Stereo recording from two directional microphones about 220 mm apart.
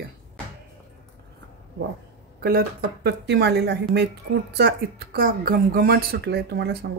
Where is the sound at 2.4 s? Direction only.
45° right (ahead or behind).